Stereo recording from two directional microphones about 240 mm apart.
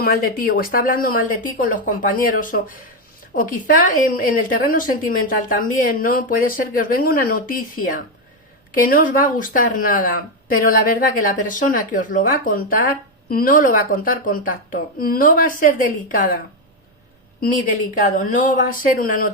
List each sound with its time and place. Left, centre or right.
0.0 s a woman's voice: left
17.4 s a woman's voice: left